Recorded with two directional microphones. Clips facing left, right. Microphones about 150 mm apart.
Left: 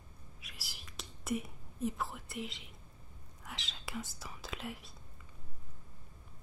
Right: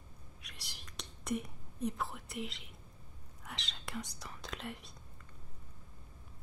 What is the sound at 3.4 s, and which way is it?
Speech, centre (ahead or behind).